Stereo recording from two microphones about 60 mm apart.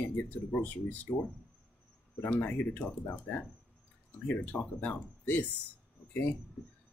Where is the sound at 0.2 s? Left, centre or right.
Left.